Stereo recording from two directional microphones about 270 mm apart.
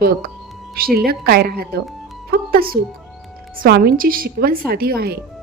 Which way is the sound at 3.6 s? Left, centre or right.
Right.